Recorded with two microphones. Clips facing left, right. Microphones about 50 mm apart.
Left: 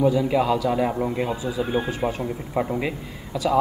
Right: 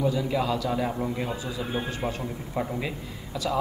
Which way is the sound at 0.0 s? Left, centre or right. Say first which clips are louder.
Left 6 dB; centre.